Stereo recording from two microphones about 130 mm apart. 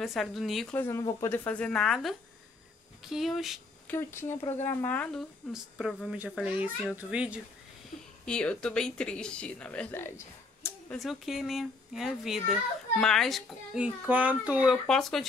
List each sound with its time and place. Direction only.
0.0 s speech: centre (ahead or behind)
0.7 s speech: 20° left (ahead or behind); by 3.6 s centre (ahead or behind)
3.8 s speech: 15° left (ahead or behind)
5.5 s speech: 5° right (ahead or behind)
8.3 s speech: 5° left (ahead or behind)
11.0 s speech: centre (ahead or behind)
14.9 s speech: 5° left (ahead or behind)